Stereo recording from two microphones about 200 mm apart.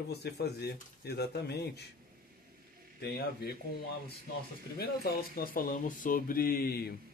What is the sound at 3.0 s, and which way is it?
Mantra, 50° left (ahead or behind).